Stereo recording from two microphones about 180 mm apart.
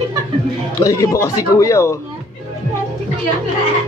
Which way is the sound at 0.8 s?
20° left (ahead or behind).